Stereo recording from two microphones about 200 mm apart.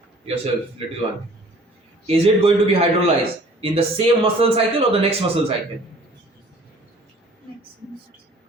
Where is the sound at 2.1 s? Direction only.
30° right (ahead or behind).